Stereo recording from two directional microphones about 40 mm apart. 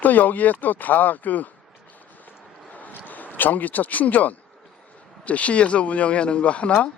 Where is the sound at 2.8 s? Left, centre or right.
Left.